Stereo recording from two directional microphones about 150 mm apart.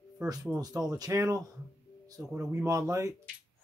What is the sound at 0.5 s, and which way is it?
Speech, 25° right (ahead or behind).